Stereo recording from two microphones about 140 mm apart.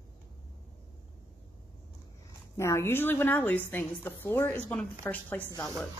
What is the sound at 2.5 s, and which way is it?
A woman's voice, 20° left (ahead or behind).